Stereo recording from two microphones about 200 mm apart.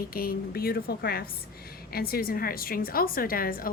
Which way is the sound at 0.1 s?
50° left (ahead or behind).